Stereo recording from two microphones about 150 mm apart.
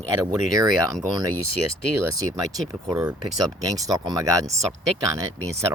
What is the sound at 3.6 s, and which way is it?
Speech, 25° right (ahead or behind).